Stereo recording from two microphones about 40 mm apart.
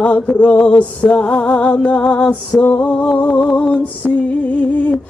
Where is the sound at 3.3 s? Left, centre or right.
Left.